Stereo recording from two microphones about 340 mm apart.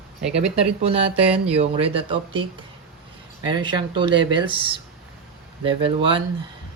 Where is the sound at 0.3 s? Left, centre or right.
Centre.